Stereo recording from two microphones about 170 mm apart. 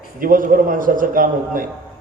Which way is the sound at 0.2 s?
55° right (ahead or behind).